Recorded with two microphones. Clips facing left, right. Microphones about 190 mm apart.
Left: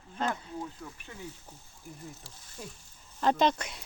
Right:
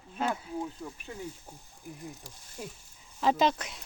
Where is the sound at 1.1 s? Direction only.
25° right (ahead or behind).